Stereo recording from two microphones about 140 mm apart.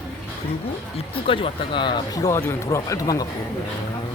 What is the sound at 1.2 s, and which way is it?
Speech, 40° left (ahead or behind).